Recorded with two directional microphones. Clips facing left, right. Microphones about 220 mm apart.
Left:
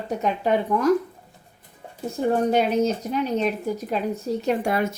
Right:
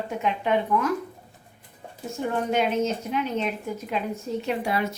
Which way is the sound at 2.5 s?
35° left (ahead or behind).